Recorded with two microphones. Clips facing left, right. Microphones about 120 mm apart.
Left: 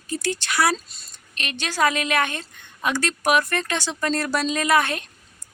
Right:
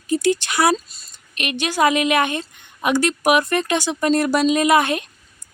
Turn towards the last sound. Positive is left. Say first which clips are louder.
# right 4 dB
turn(degrees=-15)  # may be behind; listen again after turning